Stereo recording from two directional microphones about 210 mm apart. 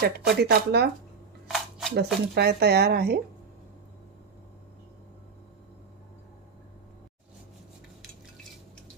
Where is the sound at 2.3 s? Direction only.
50° right (ahead or behind).